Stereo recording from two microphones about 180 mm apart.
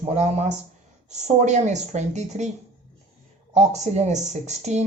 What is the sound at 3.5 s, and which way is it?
Speech, 40° right (ahead or behind).